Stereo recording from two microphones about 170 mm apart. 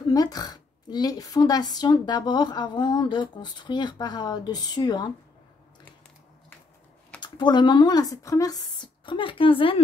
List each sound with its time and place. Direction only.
0.1 s a woman's voice: 20° left (ahead or behind)
7.2 s a woman's voice: 25° left (ahead or behind)